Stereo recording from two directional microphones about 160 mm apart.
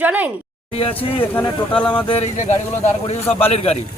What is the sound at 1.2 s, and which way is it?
Speech, 10° left (ahead or behind).